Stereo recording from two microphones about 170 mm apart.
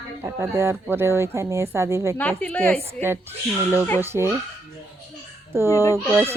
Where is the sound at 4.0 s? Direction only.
15° right (ahead or behind).